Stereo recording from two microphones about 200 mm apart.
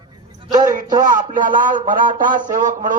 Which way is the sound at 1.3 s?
40° right (ahead or behind).